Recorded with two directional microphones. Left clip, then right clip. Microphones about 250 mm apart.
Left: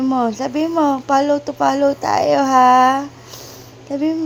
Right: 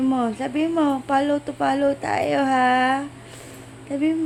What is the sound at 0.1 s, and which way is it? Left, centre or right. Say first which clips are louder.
A woman's voice: left 5 dB; centre.